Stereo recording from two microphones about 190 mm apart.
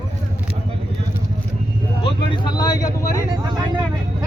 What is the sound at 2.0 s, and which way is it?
Vehicle, 25° left (ahead or behind).